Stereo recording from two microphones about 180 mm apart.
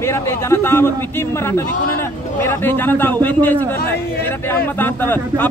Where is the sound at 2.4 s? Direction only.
10° left (ahead or behind).